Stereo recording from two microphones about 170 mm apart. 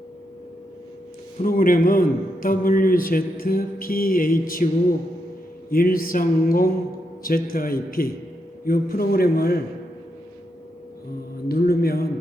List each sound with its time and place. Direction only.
1.4 s a man's voice: 55° left (ahead or behind)
5.7 s a man's voice: 55° left (ahead or behind)
11.4 s a man's voice: 65° left (ahead or behind)